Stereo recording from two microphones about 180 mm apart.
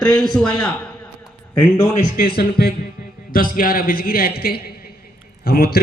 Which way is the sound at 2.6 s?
60° left (ahead or behind).